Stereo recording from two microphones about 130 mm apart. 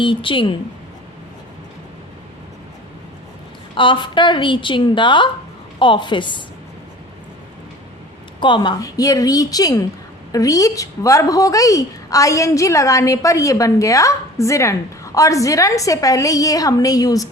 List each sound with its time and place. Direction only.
0.0 s a woman's voice: 40° left (ahead or behind)
3.8 s a woman's voice: 40° left (ahead or behind)
8.4 s a woman's voice: 35° left (ahead or behind)